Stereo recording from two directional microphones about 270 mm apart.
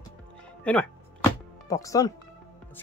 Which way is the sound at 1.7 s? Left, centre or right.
Centre.